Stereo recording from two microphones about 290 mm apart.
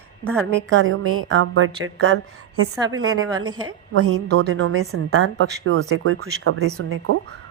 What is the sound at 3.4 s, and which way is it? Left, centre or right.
Speech, centre.